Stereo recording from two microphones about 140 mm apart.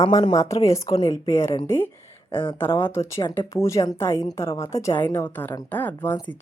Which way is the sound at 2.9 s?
20° left (ahead or behind).